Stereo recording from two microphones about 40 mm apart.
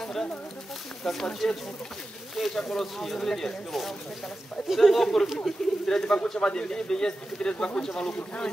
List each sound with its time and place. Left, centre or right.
0.0 s a sound: centre
1.0 s a man's voice: centre; by 7.8 s left
7.8 s speech: centre